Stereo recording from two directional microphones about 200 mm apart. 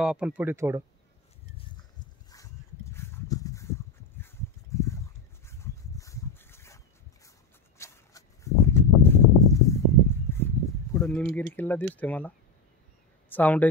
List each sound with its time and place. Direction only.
0.0 s speech: 5° right (ahead or behind)
2.3 s a sound: 15° left (ahead or behind)
4.7 s clip-clop: 15° left (ahead or behind)
5.5 s dog: 15° left (ahead or behind)
7.2 s a sound: 15° left (ahead or behind)
13.3 s speech: 10° left (ahead or behind)